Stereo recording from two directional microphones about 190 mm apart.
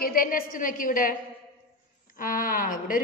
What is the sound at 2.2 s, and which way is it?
Speech, 45° left (ahead or behind).